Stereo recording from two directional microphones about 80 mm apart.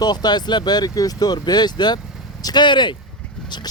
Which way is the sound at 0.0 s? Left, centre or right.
Left.